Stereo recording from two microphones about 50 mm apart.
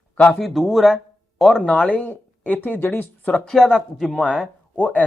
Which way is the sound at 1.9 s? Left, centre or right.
Left.